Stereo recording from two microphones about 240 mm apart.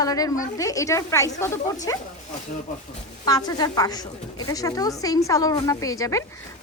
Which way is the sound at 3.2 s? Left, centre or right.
Centre.